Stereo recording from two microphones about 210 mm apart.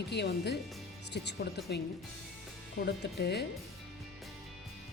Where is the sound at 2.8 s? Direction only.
50° left (ahead or behind).